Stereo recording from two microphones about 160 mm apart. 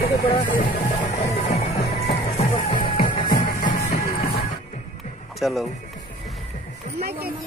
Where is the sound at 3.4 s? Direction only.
60° left (ahead or behind).